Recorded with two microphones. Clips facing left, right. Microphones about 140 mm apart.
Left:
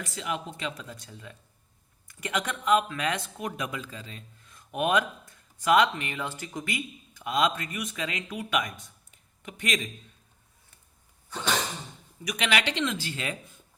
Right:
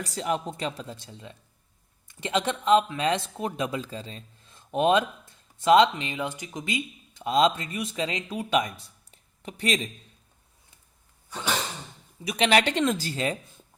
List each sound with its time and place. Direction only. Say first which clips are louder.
0.0 s speech: right 5 dB; 35° right (ahead or behind)
12.2 s speech: right 6 dB; 25° right (ahead or behind)
12.5 s speech: right 6 dB; 40° right (ahead or behind)